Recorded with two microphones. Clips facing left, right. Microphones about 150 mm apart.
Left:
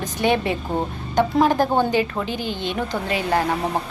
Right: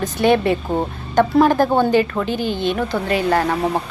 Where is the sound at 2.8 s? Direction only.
15° left (ahead or behind).